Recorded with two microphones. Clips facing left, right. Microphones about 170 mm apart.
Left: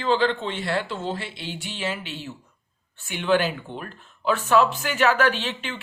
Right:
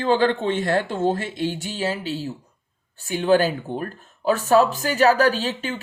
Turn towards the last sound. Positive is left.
turn(degrees=-40)  # may be behind; listen again after turning